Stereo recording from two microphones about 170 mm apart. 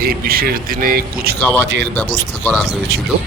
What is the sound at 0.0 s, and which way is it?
A man's voice, 60° right (ahead or behind).